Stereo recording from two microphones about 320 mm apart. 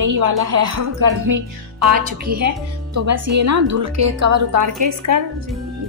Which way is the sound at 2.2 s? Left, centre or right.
Right.